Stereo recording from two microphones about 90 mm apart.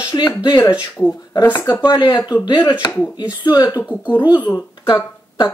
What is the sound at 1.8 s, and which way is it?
Speech, 60° left (ahead or behind).